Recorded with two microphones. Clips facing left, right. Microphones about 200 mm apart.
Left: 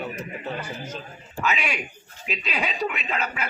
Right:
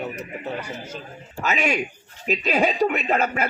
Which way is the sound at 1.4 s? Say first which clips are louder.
Right 4 dB; 45° right (ahead or behind).